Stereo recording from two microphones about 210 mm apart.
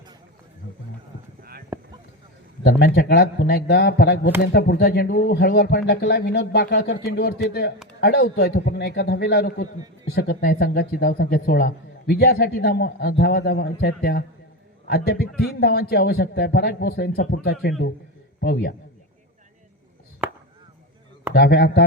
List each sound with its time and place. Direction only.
1.7 s a sound: 10° right (ahead or behind)
2.6 s a man's voice: 50° left (ahead or behind)
20.2 s chop: 10° right (ahead or behind)
21.3 s speech: 50° left (ahead or behind)